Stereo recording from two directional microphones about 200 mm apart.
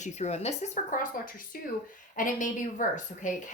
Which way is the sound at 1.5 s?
45° left (ahead or behind).